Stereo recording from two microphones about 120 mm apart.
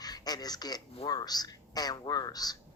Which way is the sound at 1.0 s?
35° left (ahead or behind).